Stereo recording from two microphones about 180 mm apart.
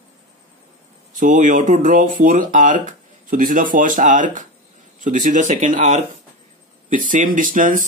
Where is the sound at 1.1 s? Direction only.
45° right (ahead or behind).